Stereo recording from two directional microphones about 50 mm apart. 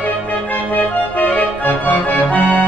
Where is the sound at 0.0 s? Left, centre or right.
Left.